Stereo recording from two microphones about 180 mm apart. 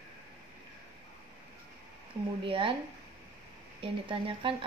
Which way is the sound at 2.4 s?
30° right (ahead or behind).